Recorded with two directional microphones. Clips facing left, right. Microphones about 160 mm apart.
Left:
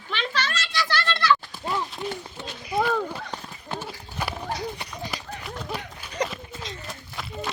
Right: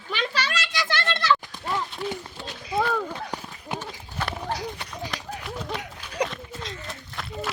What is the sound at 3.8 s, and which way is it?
Horse, 10° left (ahead or behind).